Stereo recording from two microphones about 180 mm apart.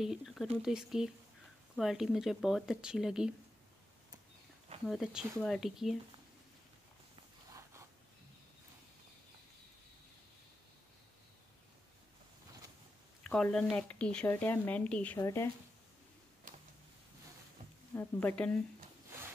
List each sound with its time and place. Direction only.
0.0 s speech: centre (ahead or behind)
4.8 s speech: centre (ahead or behind)
13.2 s speech: 5° left (ahead or behind)
16.5 s a sound: 45° right (ahead or behind)
17.9 s speech: 10° left (ahead or behind)